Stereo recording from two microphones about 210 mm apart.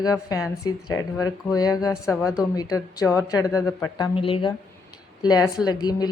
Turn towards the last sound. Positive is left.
turn(degrees=20)  # may be behind; listen again after turning